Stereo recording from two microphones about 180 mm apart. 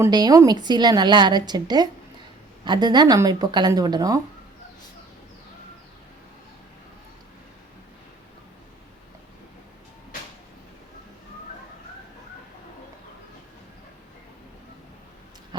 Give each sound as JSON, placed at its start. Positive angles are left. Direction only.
{"t": 0.0, "sound": "a woman's voice", "side_deg": -20}